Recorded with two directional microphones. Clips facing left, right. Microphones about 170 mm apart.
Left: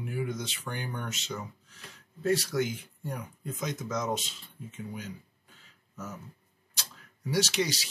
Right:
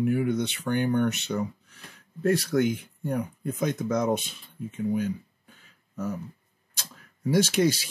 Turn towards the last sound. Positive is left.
turn(degrees=-50)  # may be behind; listen again after turning